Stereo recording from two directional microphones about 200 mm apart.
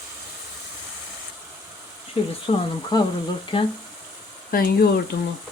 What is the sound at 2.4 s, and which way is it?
Speech, 20° left (ahead or behind).